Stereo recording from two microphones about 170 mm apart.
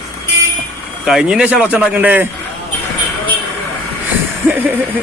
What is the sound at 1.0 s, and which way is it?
Speech, 5° right (ahead or behind).